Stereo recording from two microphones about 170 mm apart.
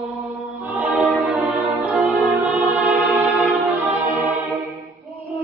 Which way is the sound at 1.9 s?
15° right (ahead or behind).